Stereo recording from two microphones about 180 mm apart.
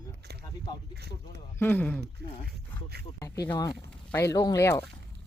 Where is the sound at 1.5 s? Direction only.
10° left (ahead or behind).